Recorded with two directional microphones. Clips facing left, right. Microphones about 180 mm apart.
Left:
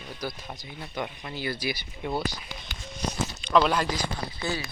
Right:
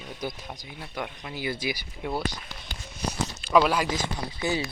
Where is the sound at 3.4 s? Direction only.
5° right (ahead or behind).